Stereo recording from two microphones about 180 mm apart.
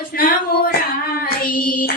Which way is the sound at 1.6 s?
55° left (ahead or behind).